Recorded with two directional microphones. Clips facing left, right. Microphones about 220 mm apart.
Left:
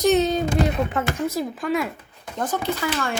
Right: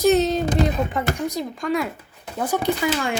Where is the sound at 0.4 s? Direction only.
35° right (ahead or behind).